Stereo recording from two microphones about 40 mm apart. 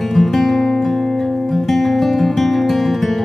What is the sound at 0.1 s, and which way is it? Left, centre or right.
Music, centre.